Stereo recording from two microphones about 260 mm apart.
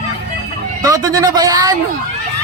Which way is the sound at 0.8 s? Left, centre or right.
Centre.